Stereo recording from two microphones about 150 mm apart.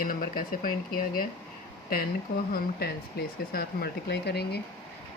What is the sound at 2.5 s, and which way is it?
Speech, 90° left.